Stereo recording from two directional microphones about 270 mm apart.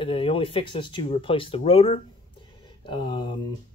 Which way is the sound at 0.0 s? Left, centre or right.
Centre.